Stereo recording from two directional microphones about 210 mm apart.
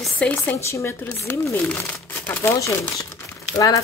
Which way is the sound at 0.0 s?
5° left (ahead or behind).